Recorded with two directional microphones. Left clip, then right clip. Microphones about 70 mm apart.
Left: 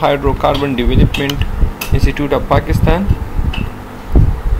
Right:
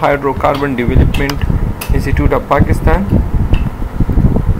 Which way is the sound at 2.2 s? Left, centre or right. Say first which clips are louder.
Right 2 dB; centre.